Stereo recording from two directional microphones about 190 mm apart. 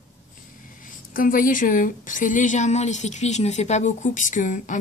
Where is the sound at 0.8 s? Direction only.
45° left (ahead or behind).